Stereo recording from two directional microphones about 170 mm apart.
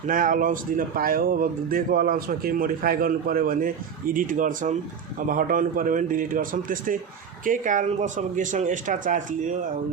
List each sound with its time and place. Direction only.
0.1 s speech: 55° right (ahead or behind)